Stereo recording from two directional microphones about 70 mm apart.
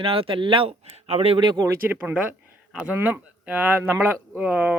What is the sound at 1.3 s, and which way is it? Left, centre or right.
Speech, right.